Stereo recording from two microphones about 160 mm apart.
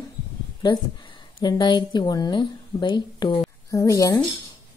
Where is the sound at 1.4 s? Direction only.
25° left (ahead or behind).